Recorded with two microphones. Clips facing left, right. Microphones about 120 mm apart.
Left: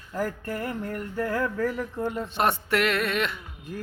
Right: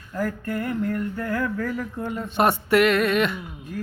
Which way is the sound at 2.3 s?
5° right (ahead or behind).